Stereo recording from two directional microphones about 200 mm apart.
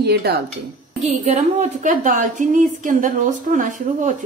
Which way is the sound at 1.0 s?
35° right (ahead or behind).